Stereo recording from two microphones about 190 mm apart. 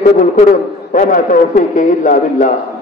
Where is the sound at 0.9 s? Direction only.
45° left (ahead or behind).